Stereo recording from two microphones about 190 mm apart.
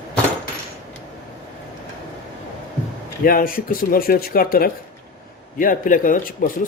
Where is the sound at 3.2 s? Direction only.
50° left (ahead or behind).